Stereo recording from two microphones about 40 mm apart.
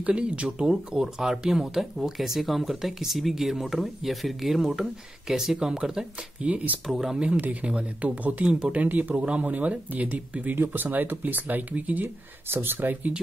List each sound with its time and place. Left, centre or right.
0.0 s speech: right
0.7 s speech: centre
6.9 s speech: centre
7.6 s speech: right
9.1 s speech: right
9.4 s speech: right
10.5 s speech: right
11.4 s speech: right
12.4 s speech: right